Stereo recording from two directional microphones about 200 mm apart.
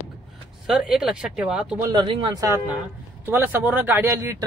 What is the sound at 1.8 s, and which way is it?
Speech, 25° right (ahead or behind).